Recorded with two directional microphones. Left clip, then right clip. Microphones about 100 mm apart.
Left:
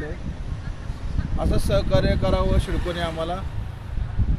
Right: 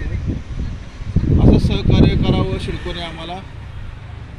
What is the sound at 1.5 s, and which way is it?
Speech, 55° left (ahead or behind).